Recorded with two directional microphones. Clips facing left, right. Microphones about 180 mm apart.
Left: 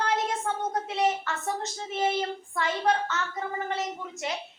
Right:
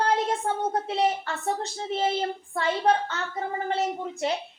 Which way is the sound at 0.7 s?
30° right (ahead or behind).